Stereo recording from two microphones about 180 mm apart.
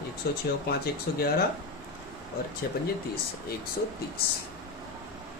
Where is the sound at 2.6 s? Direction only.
60° left (ahead or behind).